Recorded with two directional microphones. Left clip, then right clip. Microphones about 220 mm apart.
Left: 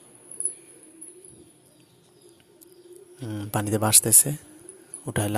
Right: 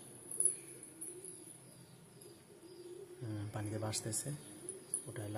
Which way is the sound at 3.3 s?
45° left (ahead or behind).